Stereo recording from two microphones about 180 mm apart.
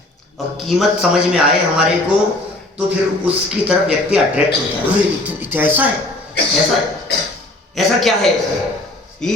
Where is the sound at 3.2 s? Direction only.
5° right (ahead or behind).